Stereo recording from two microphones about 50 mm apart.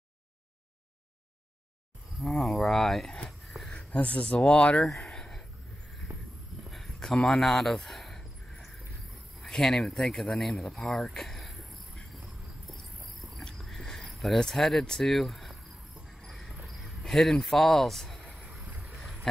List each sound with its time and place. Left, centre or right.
2.1 s speech: centre
3.3 s a sound: centre
3.7 s speech: left
4.7 s a sound: centre
9.5 s speech: centre
12.1 s cricket: centre
13.6 s a sound: centre
14.1 s speech: centre
16.2 s cricket: centre